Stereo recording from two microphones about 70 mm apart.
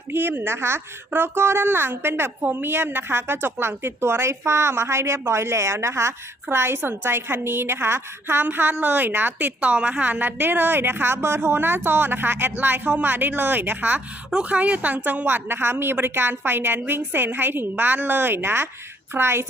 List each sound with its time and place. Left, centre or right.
0.1 s a woman's voice: right